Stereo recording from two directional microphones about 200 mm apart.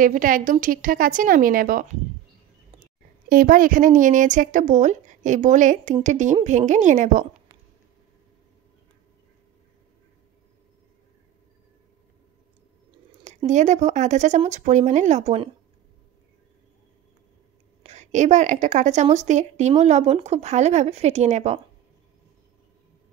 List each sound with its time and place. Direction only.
0.0 s a woman's voice: 40° right (ahead or behind)
3.3 s speech: 45° right (ahead or behind)
13.5 s speech: 35° right (ahead or behind)
17.8 s a woman's voice: 35° right (ahead or behind)